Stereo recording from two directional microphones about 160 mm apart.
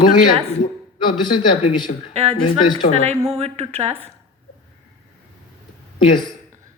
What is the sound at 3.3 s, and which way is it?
Speech, 40° right (ahead or behind).